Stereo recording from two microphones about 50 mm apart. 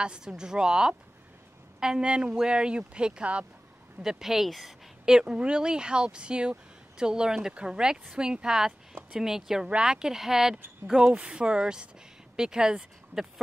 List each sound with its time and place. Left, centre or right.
0.0 s speech: centre
4.0 s speech: centre
5.0 s speech: centre